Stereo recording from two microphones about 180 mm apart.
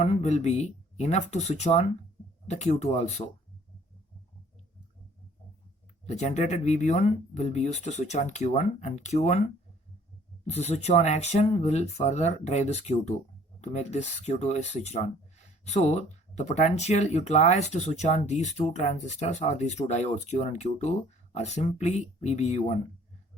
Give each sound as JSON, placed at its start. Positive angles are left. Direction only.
{"t": 0.0, "sound": "speech", "side_deg": 40}
{"t": 6.1, "sound": "speech", "side_deg": 40}
{"t": 10.4, "sound": "speech", "side_deg": 35}